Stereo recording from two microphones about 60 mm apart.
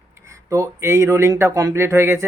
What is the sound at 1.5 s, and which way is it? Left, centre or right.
Speech, right.